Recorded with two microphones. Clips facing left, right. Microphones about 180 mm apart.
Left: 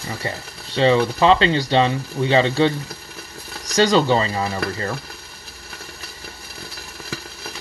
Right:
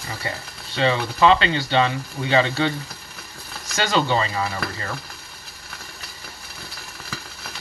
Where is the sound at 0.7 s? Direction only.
30° left (ahead or behind).